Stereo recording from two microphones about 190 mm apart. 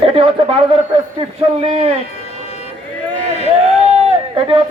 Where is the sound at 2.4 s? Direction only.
35° left (ahead or behind).